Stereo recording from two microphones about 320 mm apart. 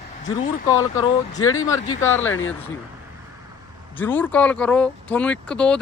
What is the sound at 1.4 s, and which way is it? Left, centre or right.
Speech, left.